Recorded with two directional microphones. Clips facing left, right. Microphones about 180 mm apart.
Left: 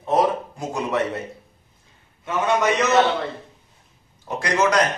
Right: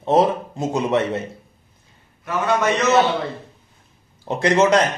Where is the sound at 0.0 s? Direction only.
25° right (ahead or behind).